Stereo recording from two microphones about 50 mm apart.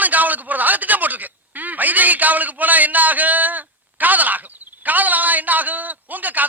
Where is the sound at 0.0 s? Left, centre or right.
Right.